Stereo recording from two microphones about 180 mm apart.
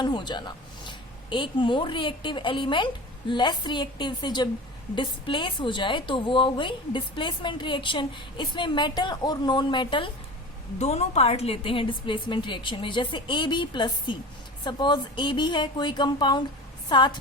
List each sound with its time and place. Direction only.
0.0 s a woman's voice: 25° left (ahead or behind)
10.8 s a woman's voice: 35° left (ahead or behind)